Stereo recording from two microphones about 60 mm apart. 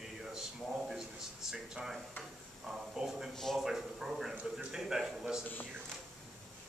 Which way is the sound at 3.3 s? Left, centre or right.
Centre.